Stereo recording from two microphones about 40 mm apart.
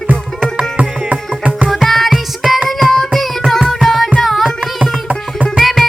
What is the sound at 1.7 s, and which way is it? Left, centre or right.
Music, centre.